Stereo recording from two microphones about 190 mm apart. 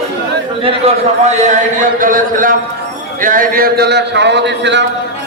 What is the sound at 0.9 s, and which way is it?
Speech, 35° right (ahead or behind).